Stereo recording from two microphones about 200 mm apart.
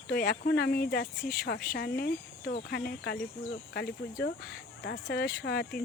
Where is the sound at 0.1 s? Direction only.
50° left (ahead or behind).